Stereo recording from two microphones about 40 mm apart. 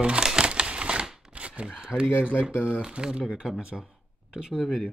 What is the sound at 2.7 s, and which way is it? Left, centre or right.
Speech, right.